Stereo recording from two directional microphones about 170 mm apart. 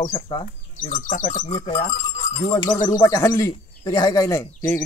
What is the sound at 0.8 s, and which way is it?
Speech, 50° left (ahead or behind).